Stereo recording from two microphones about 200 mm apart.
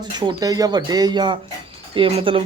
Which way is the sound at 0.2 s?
20° right (ahead or behind).